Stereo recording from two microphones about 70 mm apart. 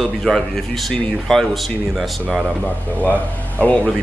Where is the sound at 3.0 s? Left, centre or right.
Left.